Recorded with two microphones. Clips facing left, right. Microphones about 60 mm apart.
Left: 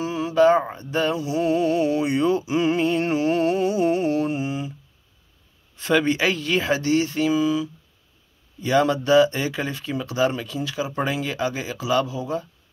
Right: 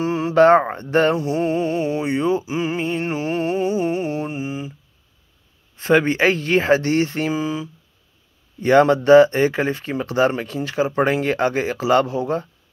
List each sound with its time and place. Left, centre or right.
0.0 s mantra: right
5.8 s speech: right